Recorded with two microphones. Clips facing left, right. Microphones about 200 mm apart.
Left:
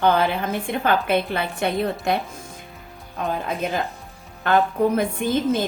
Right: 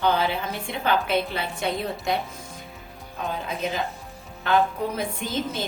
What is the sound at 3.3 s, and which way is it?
A woman's voice, 50° left (ahead or behind).